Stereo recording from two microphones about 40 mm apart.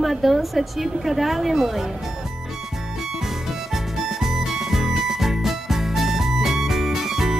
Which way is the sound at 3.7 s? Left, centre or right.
Centre.